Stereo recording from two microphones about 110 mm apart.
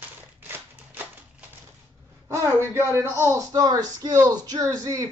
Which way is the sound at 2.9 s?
25° right (ahead or behind).